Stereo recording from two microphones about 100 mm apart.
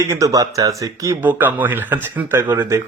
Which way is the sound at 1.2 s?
20° right (ahead or behind).